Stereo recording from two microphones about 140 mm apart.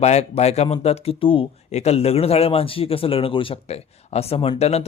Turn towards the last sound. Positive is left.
turn(degrees=50)  # may be behind; listen again after turning